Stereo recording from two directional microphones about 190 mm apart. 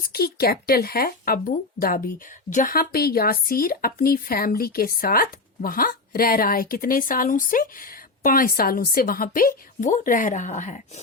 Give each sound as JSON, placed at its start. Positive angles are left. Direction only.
{"t": 0.0, "sound": "speech", "side_deg": 55}